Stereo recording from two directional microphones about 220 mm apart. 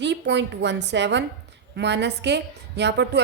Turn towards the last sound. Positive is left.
turn(degrees=-50)  # may be behind; listen again after turning